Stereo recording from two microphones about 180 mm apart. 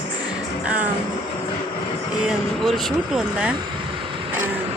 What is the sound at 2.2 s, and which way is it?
Speech, centre (ahead or behind).